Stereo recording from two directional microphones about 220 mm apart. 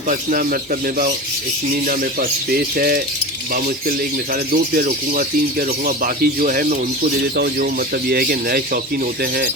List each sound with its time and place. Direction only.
0.1 s speech: 40° right (ahead or behind)
2.5 s speech: 45° right (ahead or behind)
4.5 s speech: 40° right (ahead or behind)